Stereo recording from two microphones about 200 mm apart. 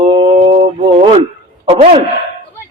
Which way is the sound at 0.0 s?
25° right (ahead or behind).